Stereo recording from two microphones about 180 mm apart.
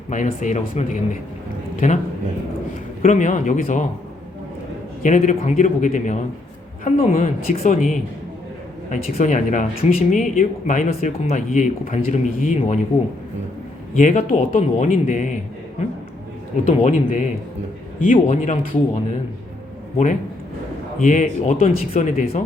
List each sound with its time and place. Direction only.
0.1 s a man's voice: 45° left (ahead or behind)
3.0 s speech: 45° left (ahead or behind)
5.0 s a man's voice: 45° left (ahead or behind)
13.9 s speech: 45° left (ahead or behind)
16.6 s speech: 45° left (ahead or behind)
21.0 s speech: 45° left (ahead or behind)